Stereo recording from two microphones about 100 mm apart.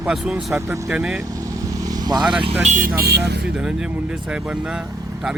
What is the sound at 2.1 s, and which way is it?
Speech, 45° right (ahead or behind).